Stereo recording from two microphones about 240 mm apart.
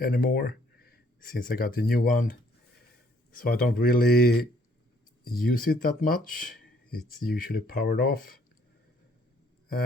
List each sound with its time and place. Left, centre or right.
0.0 s speech: left
3.3 s speech: left